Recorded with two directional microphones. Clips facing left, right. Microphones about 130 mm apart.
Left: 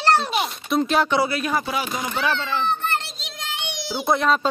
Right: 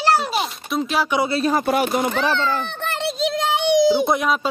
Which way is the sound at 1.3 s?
35° right (ahead or behind).